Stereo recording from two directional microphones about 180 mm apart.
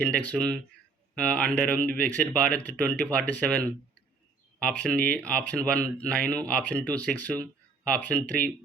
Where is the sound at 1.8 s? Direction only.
50° right (ahead or behind).